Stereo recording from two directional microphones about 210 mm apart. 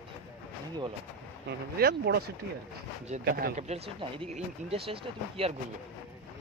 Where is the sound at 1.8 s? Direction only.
50° right (ahead or behind).